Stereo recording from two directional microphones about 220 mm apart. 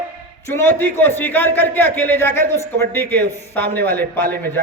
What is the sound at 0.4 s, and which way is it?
A man's voice, 10° left (ahead or behind).